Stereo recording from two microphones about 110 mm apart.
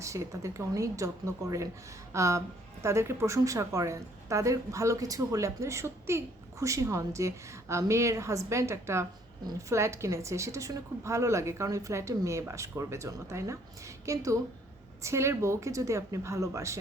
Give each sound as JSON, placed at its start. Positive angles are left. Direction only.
{"t": 0.0, "sound": "a woman's voice", "side_deg": -30}